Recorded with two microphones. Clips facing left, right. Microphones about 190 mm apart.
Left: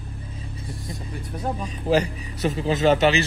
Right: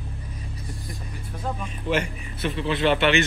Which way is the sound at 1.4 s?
35° left (ahead or behind).